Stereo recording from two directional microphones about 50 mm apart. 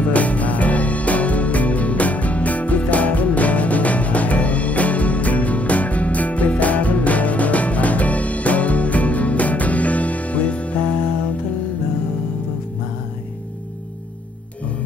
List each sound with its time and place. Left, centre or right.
0.0 s music: left